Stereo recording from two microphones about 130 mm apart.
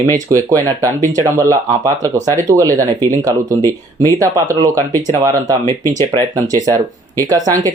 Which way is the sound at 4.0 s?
25° right (ahead or behind).